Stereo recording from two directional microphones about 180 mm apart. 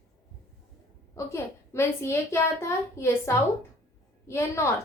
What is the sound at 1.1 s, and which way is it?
A child's voice, 15° left (ahead or behind).